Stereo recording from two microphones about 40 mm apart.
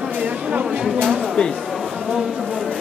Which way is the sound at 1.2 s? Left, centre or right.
Centre.